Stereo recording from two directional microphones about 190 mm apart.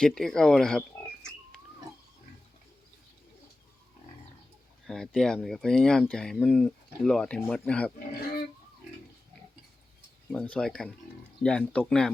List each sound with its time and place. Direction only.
0.0 s speech: 5° left (ahead or behind)
4.9 s speech: 5° left (ahead or behind)
10.3 s speech: 5° left (ahead or behind)